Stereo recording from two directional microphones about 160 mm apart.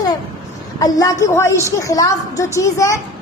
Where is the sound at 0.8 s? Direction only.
25° left (ahead or behind).